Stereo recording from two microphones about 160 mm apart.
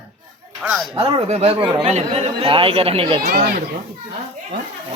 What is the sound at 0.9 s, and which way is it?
Speech, 40° right (ahead or behind).